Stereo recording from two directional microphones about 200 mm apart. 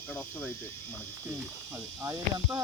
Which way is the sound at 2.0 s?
15° right (ahead or behind).